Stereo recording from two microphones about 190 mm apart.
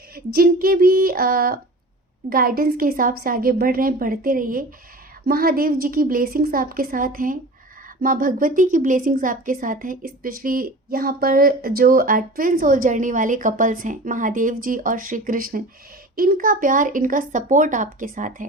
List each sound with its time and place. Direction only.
0.1 s a woman's voice: 50° right (ahead or behind)